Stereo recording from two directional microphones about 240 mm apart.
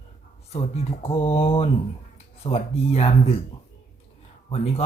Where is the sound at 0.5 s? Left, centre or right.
Left.